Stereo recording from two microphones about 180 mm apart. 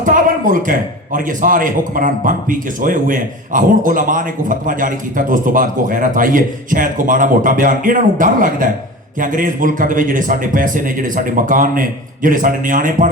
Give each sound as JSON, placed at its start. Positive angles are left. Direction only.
{"t": 0.0, "sound": "a man's voice", "side_deg": -50}